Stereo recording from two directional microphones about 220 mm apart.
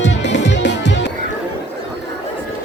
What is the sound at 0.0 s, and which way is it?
Music, 55° left (ahead or behind).